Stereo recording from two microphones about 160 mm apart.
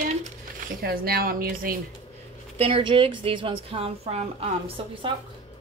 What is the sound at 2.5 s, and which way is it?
A woman's voice, 35° right (ahead or behind).